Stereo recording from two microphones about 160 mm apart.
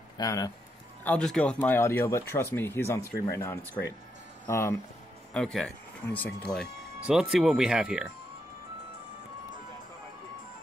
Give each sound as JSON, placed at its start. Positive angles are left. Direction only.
{"t": 0.2, "sound": "speech", "side_deg": 25}
{"t": 1.0, "sound": "speech", "side_deg": 5}
{"t": 5.3, "sound": "speech", "side_deg": 0}